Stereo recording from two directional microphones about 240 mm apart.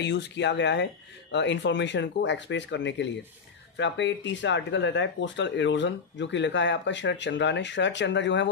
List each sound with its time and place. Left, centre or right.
0.0 s speech: left